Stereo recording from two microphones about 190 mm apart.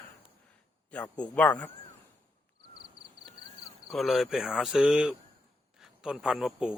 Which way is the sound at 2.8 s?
30° right (ahead or behind).